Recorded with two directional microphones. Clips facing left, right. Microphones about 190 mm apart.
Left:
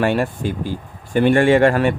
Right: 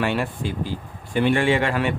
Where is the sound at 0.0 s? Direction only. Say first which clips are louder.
Left 5 dB; 45° left (ahead or behind).